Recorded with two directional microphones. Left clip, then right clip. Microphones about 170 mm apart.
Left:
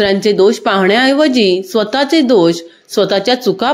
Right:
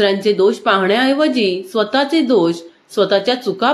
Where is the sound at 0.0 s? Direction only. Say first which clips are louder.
Left 3 dB; 45° left (ahead or behind).